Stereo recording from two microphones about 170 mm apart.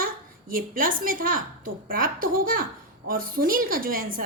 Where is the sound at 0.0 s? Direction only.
55° right (ahead or behind).